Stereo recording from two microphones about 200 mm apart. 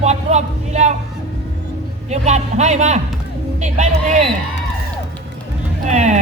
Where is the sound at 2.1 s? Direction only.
35° right (ahead or behind).